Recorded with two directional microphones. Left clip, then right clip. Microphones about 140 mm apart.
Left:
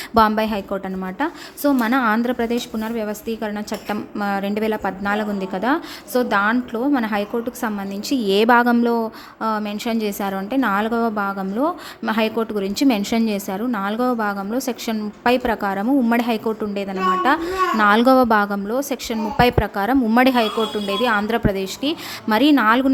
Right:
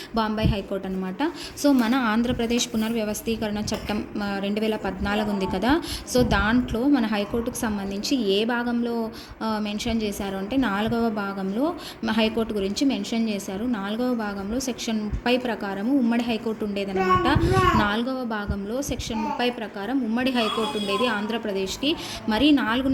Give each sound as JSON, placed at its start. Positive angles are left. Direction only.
{"t": 0.1, "sound": "a woman's voice", "side_deg": 40}
{"t": 1.2, "sound": "a woman's voice", "side_deg": 20}
{"t": 8.2, "sound": "a woman's voice", "side_deg": 40}
{"t": 9.4, "sound": "a woman's voice", "side_deg": 20}
{"t": 12.8, "sound": "a woman's voice", "side_deg": 45}
{"t": 18.0, "sound": "a woman's voice", "side_deg": 60}
{"t": 20.3, "sound": "a woman's voice", "side_deg": 30}